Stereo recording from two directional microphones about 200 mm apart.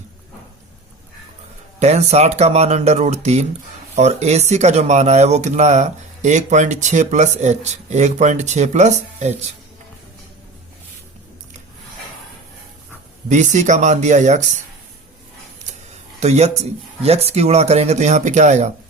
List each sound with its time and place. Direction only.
1.8 s speech: 35° right (ahead or behind)
13.2 s speech: 35° right (ahead or behind)
16.2 s speech: 35° right (ahead or behind)